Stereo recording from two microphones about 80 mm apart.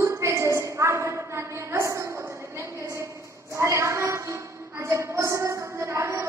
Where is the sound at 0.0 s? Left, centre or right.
Right.